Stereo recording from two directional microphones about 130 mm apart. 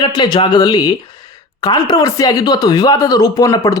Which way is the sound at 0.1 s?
35° left (ahead or behind).